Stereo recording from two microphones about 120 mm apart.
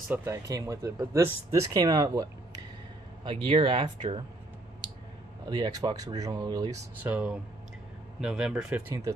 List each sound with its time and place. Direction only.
0.1 s speech: 25° right (ahead or behind)
3.4 s speech: 45° right (ahead or behind)
5.5 s speech: 35° right (ahead or behind)
7.0 s speech: 10° right (ahead or behind)